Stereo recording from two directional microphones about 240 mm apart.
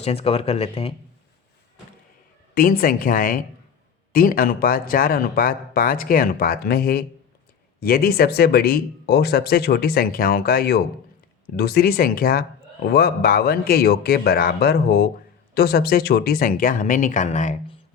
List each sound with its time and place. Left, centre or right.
0.0 s speech: left
2.6 s speech: left